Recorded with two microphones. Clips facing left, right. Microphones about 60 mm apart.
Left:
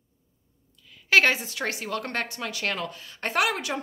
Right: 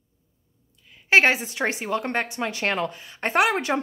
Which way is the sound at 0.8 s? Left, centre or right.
Right.